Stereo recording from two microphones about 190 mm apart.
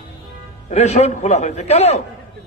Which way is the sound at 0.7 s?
35° left (ahead or behind).